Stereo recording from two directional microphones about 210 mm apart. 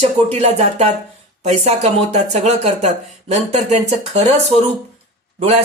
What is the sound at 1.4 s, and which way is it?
Speech, 30° right (ahead or behind).